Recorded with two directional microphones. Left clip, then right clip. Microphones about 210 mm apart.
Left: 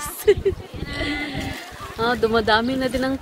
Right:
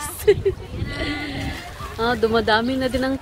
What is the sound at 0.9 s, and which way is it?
Livestock, centre (ahead or behind).